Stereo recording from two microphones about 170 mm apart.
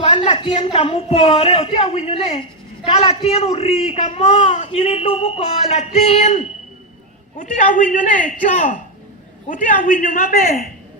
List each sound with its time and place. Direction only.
0.3 s a man's voice: 30° left (ahead or behind); by 10.7 s 60° left (ahead or behind)